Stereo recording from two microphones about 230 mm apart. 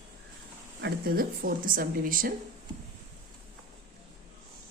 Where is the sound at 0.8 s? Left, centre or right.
Right.